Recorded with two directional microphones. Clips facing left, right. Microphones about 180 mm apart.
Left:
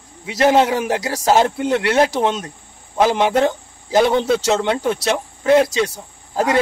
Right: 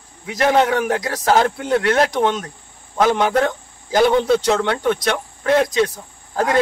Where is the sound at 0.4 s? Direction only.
25° left (ahead or behind).